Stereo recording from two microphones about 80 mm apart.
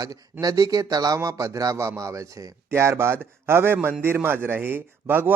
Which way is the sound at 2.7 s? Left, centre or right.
Right.